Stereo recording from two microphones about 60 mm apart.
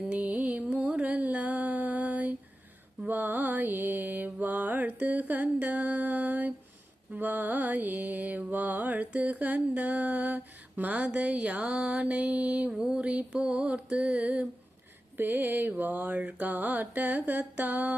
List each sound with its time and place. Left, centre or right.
0.1 s music: right
3.1 s mantra: right
7.1 s music: right
15.2 s mantra: right